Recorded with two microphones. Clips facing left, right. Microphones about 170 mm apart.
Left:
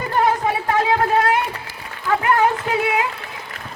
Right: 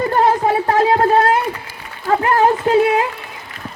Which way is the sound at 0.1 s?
40° right (ahead or behind).